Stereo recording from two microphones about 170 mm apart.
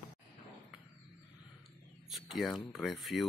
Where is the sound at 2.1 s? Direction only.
Centre (ahead or behind).